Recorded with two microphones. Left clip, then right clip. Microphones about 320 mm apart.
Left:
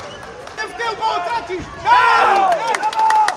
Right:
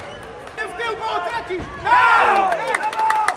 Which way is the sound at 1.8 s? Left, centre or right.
Left.